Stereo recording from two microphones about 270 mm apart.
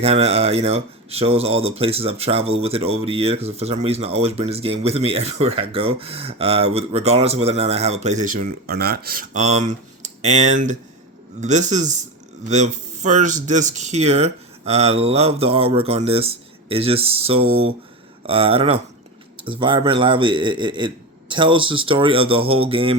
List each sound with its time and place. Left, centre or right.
0.0 s speech: right